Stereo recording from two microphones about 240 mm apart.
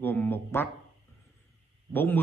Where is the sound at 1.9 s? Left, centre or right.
Centre.